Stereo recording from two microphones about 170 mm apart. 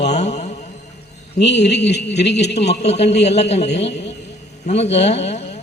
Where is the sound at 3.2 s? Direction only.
40° left (ahead or behind).